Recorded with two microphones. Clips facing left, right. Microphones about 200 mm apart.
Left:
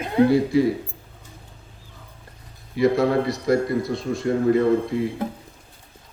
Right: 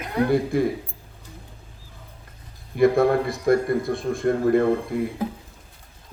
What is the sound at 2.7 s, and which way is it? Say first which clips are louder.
A man's voice: right 1 dB; 50° right (ahead or behind).